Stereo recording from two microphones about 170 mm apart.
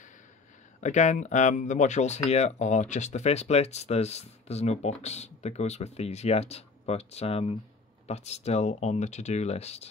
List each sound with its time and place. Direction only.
0.7 s speech: 45° left (ahead or behind)